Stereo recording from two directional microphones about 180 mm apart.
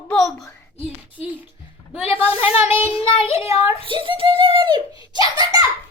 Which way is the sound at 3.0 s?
30° left (ahead or behind).